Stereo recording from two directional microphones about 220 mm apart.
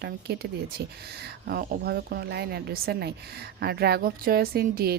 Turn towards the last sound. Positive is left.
turn(degrees=-45)  # may be behind; listen again after turning